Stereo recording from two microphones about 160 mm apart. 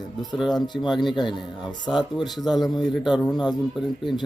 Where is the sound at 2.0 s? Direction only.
Centre (ahead or behind).